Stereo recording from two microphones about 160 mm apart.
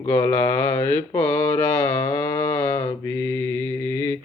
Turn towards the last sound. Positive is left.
turn(degrees=15)  # may be behind; listen again after turning